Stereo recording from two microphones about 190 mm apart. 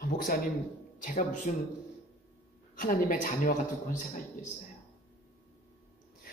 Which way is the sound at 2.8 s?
45° left (ahead or behind).